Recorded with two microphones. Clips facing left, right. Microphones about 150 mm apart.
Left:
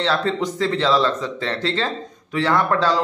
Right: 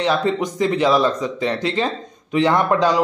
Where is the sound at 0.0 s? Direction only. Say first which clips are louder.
Right 2 dB; 15° right (ahead or behind).